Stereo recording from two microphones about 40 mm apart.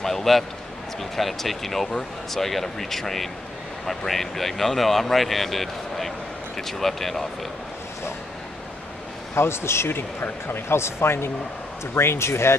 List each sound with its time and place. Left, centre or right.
0.0 s a man's voice: centre
9.3 s speech: left